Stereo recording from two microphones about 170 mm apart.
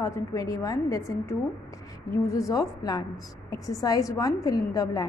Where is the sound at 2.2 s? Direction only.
20° left (ahead or behind).